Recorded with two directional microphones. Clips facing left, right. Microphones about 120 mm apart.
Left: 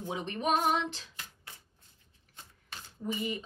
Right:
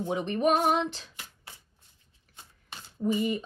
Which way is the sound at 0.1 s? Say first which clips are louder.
Right 5 dB; 50° right (ahead or behind).